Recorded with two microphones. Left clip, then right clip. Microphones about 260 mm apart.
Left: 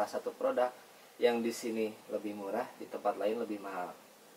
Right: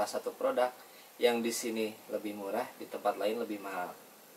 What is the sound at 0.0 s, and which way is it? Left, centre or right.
Speech, centre.